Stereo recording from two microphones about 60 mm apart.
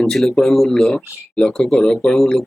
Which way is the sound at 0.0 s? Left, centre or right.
Centre.